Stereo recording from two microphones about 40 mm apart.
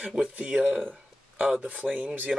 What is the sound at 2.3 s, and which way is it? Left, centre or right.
Speech, centre.